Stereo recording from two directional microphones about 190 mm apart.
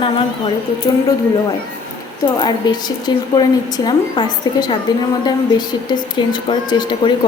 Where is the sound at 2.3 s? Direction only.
20° left (ahead or behind).